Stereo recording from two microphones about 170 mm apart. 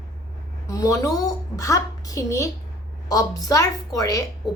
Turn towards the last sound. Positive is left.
turn(degrees=20)  # may be behind; listen again after turning